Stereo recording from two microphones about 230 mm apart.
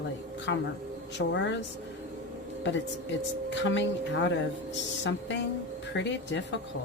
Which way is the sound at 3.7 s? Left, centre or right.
Left.